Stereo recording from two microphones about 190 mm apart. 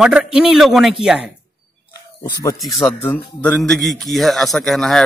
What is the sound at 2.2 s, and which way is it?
Speech, 20° left (ahead or behind).